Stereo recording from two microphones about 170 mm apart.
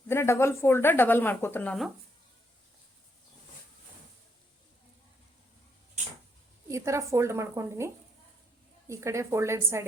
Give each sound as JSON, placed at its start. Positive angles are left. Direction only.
{"t": 0.1, "sound": "speech", "side_deg": 15}
{"t": 6.7, "sound": "a woman's voice", "side_deg": -15}
{"t": 8.9, "sound": "a woman's voice", "side_deg": -15}